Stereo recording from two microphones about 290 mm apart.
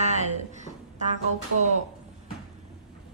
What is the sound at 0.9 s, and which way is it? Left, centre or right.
Speech, right.